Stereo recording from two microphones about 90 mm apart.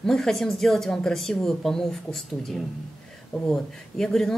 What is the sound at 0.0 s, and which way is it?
Speech, 5° left (ahead or behind).